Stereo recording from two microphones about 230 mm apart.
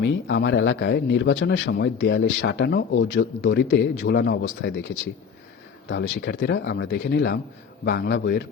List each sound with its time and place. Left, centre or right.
0.0 s speech: left
5.9 s speech: left